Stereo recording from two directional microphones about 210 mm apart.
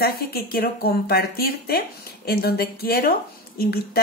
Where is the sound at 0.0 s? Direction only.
45° left (ahead or behind).